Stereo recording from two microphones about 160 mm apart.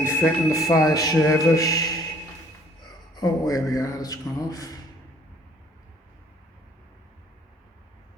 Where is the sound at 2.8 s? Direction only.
25° left (ahead or behind).